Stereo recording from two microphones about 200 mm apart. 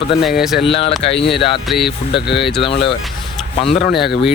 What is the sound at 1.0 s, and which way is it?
Mantra, 30° left (ahead or behind).